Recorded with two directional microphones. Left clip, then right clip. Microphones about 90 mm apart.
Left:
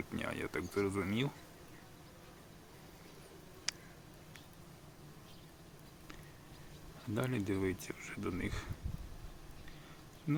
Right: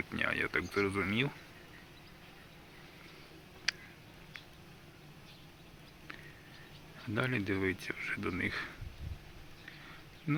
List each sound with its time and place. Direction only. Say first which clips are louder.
0.1 s speech: right 9 dB; 20° left (ahead or behind)
3.7 s a sound: right 6 dB; 20° left (ahead or behind)
7.1 s speech: right 3 dB; 15° left (ahead or behind)
10.3 s speech: right 2 dB; 20° left (ahead or behind)